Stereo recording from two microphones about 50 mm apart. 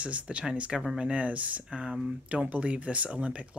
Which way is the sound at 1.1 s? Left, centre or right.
Right.